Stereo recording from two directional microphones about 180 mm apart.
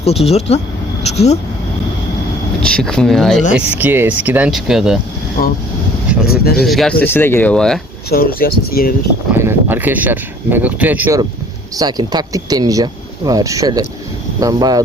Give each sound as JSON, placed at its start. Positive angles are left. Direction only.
{"t": 0.0, "sound": "speech", "side_deg": 35}
{"t": 2.6, "sound": "speech", "side_deg": 5}
{"t": 3.5, "sound": "speech", "side_deg": -10}
{"t": 6.2, "sound": "speech", "side_deg": 60}
{"t": 6.6, "sound": "speech", "side_deg": 0}
{"t": 8.1, "sound": "speech", "side_deg": 55}
{"t": 9.3, "sound": "speech", "side_deg": -10}
{"t": 11.8, "sound": "speech", "side_deg": -20}